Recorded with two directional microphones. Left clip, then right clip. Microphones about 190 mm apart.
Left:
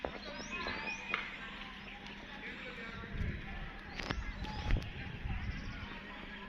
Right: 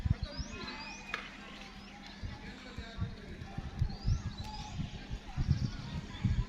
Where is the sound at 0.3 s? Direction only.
50° right (ahead or behind).